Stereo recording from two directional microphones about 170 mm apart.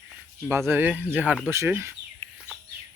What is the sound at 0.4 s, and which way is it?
Speech, 15° right (ahead or behind).